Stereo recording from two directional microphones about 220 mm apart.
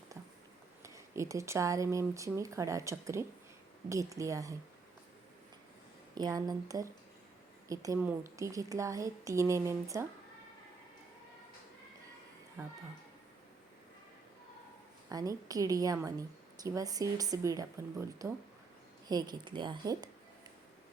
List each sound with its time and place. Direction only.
0.8 s speech: 15° right (ahead or behind)
6.1 s speech: 15° right (ahead or behind)
12.6 s speech: 15° right (ahead or behind)
15.1 s a woman's voice: 15° right (ahead or behind)